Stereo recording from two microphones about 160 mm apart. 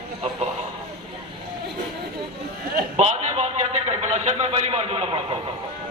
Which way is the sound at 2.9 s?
40° right (ahead or behind).